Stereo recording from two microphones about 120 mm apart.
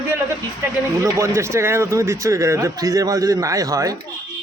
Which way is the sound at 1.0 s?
25° right (ahead or behind).